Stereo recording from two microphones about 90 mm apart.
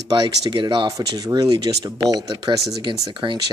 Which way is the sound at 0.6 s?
65° right (ahead or behind).